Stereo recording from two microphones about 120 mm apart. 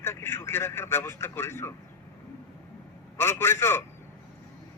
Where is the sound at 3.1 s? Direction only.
20° left (ahead or behind).